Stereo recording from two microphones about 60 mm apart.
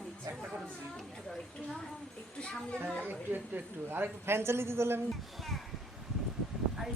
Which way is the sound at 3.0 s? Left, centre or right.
Right.